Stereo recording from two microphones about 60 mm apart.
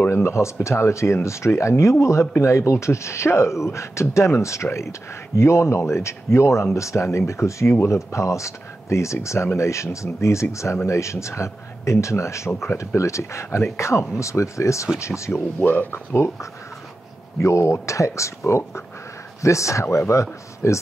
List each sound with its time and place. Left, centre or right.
0.1 s speech: left
15.6 s speech: left
17.4 s speech: left